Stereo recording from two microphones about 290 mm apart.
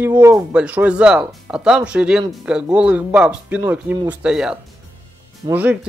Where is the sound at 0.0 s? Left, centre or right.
Centre.